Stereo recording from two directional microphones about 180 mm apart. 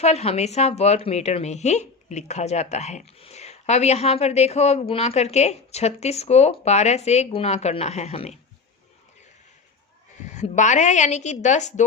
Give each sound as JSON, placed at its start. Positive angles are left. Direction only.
{"t": 0.0, "sound": "a woman's voice", "side_deg": 35}
{"t": 10.2, "sound": "a woman's voice", "side_deg": 40}